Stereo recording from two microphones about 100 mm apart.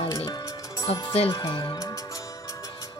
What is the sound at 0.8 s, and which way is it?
Speech, 35° left (ahead or behind).